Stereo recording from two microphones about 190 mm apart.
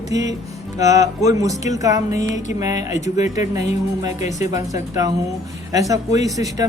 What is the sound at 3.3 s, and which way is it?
Speech, 15° right (ahead or behind).